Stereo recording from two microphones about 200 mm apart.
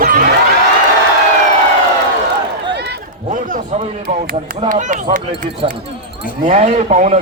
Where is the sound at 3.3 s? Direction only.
40° right (ahead or behind).